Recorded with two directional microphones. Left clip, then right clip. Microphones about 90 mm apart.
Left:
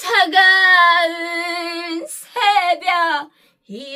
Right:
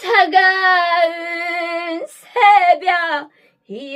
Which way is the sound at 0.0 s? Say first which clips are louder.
Right 1 dB; 15° left (ahead or behind).